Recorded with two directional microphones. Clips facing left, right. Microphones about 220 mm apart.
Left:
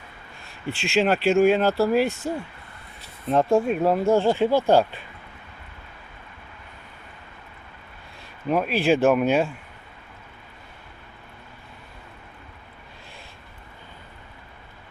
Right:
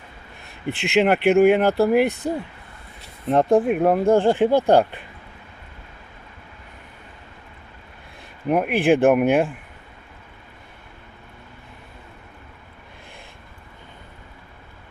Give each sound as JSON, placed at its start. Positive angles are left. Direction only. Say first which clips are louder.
{"t": 0.7, "sound": "speech", "louder": "right 3 dB", "side_deg": -20}
{"t": 8.4, "sound": "speech", "louder": "right 3 dB", "side_deg": -15}